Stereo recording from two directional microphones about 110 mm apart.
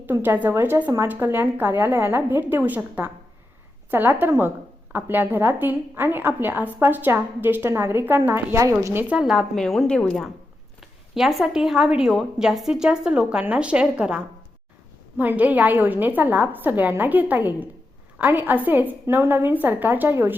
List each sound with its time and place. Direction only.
0.0 s a woman's voice: 20° right (ahead or behind)
15.2 s a woman's voice: 15° right (ahead or behind)